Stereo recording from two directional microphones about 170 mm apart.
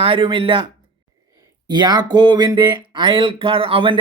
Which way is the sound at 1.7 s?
25° right (ahead or behind).